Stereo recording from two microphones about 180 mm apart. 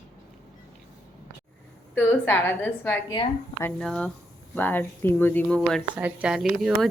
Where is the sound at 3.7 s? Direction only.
5° left (ahead or behind).